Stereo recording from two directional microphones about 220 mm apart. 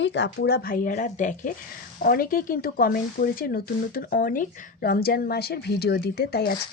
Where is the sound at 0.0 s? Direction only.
50° left (ahead or behind).